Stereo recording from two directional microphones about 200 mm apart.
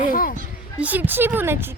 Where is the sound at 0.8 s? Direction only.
10° right (ahead or behind).